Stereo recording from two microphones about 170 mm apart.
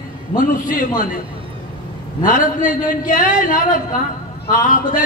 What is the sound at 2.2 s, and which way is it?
A man's voice, 50° left (ahead or behind).